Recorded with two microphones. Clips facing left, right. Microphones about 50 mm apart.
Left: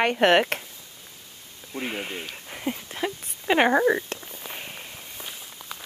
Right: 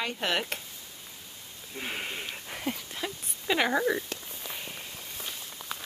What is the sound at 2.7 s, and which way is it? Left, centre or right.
Speech, left.